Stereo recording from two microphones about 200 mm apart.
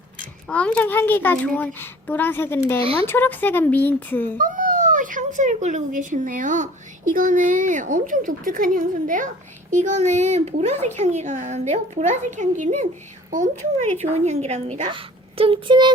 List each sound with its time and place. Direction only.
0.4 s a woman's voice: 5° left (ahead or behind)
2.8 s speech: 30° right (ahead or behind)
3.1 s a woman's voice: 10° left (ahead or behind)
4.4 s speech: 40° right (ahead or behind); by 15.9 s 25° right (ahead or behind)